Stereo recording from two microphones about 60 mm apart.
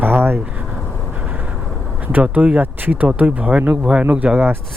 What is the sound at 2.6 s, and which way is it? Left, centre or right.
Speech, right.